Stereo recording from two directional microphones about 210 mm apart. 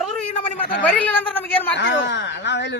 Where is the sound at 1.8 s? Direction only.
55° left (ahead or behind).